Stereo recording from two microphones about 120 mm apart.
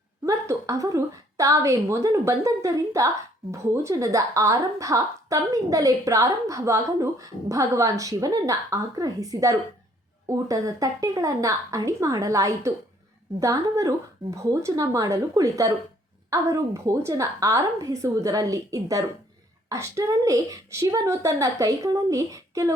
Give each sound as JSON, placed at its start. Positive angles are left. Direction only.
{"t": 0.3, "sound": "a woman's voice", "side_deg": -25}